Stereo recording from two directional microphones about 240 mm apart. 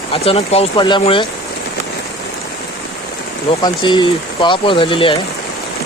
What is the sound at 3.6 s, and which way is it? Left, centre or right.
Speech, centre.